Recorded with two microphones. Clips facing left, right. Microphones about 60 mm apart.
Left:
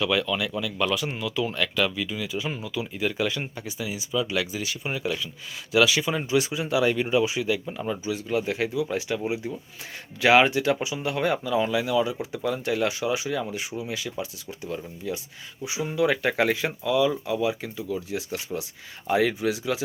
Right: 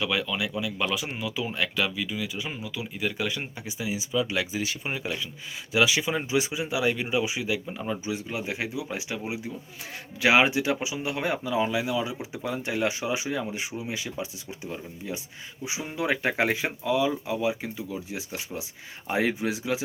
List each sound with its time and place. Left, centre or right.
0.0 s speech: centre
3.7 s speech: right